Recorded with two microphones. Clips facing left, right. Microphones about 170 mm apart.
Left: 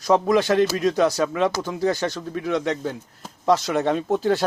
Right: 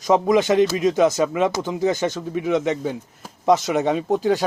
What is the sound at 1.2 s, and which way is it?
Speech, 5° right (ahead or behind).